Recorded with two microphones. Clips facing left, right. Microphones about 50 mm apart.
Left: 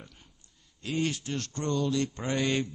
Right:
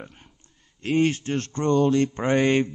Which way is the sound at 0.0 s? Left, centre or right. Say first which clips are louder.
Right 9 dB; right.